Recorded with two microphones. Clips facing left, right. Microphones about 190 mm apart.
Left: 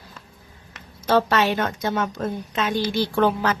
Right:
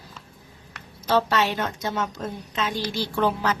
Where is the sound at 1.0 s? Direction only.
55° left (ahead or behind).